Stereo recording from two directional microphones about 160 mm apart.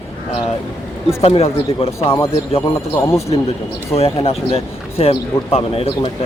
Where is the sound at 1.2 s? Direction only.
40° left (ahead or behind).